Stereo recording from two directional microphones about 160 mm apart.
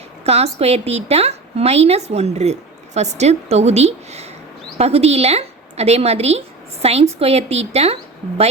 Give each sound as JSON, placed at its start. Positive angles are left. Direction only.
{"t": 0.3, "sound": "a woman's voice", "side_deg": -40}